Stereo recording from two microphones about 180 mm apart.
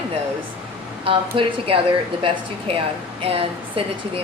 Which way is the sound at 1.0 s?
30° right (ahead or behind).